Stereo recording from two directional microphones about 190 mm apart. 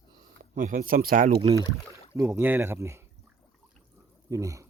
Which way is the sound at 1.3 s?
30° right (ahead or behind).